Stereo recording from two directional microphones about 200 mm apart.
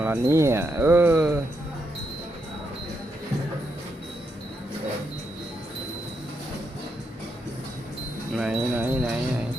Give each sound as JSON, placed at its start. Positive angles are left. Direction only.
{"t": 0.0, "sound": "speech", "side_deg": -15}
{"t": 8.4, "sound": "speech", "side_deg": -5}